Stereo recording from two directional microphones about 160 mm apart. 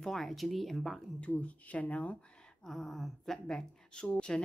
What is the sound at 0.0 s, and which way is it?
A woman's voice, centre (ahead or behind).